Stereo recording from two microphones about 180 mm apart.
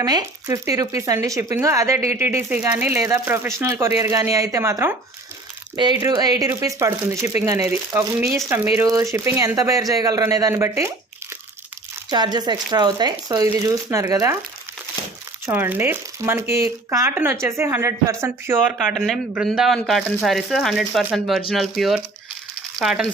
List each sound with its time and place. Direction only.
0.0 s speech: 20° right (ahead or behind)
5.7 s speech: 25° right (ahead or behind)
12.1 s speech: 25° right (ahead or behind)
15.4 s speech: 10° right (ahead or behind)
18.8 s speech: centre (ahead or behind)